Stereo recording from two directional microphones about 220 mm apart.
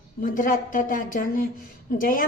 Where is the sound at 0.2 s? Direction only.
40° left (ahead or behind).